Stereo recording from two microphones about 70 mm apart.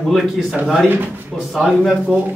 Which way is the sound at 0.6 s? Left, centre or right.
Centre.